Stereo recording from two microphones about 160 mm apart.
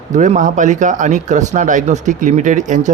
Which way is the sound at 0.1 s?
50° right (ahead or behind).